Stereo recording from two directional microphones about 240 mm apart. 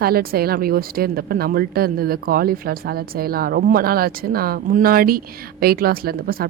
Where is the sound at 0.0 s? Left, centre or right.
Right.